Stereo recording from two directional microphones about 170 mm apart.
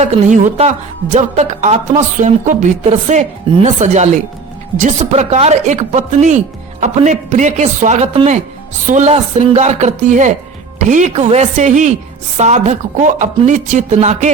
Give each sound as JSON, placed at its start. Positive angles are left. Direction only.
{"t": 0.0, "sound": "a woman's voice", "side_deg": -45}